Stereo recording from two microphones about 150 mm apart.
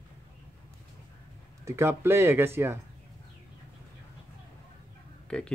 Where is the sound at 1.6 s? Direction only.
15° right (ahead or behind).